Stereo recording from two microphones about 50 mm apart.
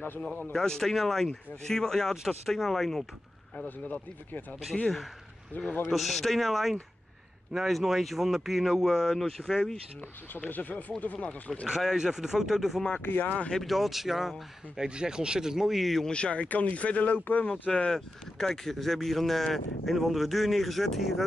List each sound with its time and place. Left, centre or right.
0.5 s speech: centre
3.6 s speech: left
5.9 s speech: centre
10.5 s speech: left
11.6 s speech: centre
13.0 s speech: left
13.7 s speech: centre
14.8 s speech: centre
16.1 s speech: left
17.5 s speech: centre
17.9 s speech: centre